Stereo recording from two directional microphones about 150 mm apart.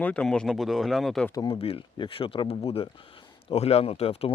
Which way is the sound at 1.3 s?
30° left (ahead or behind).